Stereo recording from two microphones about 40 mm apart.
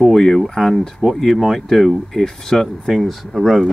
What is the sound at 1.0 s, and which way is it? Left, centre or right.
Speech, centre.